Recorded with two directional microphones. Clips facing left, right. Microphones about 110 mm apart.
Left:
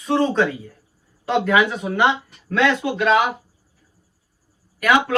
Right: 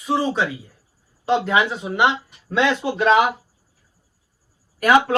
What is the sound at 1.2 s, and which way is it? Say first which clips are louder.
Speech: left 1 dB; 25° right (ahead or behind).